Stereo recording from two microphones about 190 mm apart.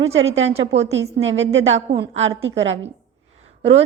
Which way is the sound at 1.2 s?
75° right (ahead or behind).